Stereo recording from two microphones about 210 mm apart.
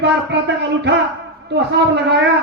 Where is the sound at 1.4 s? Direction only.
55° right (ahead or behind).